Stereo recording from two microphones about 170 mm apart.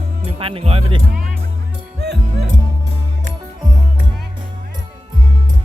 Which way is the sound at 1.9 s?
75° right (ahead or behind).